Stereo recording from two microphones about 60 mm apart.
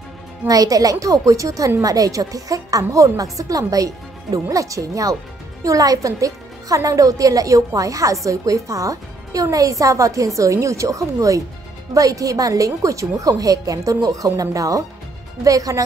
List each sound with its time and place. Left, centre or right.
0.5 s a woman's voice: right